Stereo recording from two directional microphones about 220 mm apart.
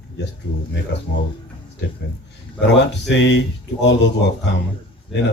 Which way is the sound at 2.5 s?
50° left (ahead or behind).